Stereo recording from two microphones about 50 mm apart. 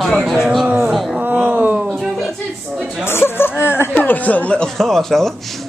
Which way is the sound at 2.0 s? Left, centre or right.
Centre.